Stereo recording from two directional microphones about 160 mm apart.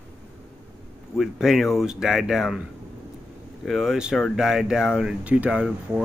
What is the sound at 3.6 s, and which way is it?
Speech, centre (ahead or behind).